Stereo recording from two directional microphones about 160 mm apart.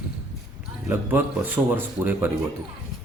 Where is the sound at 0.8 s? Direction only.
10° right (ahead or behind).